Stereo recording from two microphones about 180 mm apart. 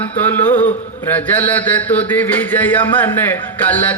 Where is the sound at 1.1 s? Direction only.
10° left (ahead or behind).